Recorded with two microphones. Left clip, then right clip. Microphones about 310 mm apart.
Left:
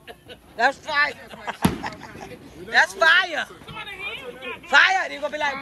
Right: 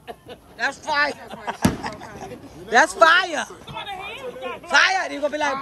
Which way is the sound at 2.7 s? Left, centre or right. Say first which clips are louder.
Right 2 dB; right.